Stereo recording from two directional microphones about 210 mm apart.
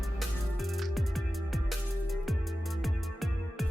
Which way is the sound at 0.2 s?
Centre (ahead or behind).